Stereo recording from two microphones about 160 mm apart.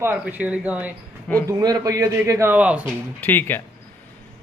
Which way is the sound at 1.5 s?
25° right (ahead or behind).